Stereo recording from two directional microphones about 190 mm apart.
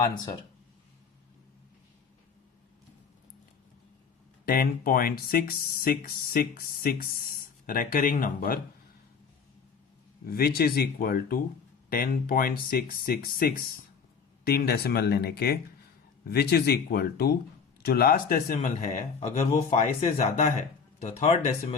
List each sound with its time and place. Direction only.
4.4 s speech: 50° left (ahead or behind)
10.2 s speech: 55° left (ahead or behind); by 21.8 s 35° left (ahead or behind)